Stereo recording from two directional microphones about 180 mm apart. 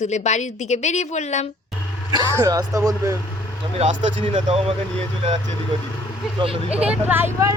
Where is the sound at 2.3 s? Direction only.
20° right (ahead or behind).